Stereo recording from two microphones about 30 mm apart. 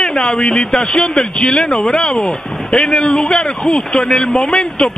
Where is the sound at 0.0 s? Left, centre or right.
Left.